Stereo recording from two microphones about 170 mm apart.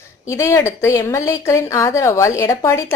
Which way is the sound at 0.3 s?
15° left (ahead or behind).